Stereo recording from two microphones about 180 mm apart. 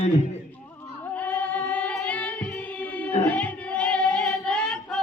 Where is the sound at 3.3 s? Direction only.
5° left (ahead or behind).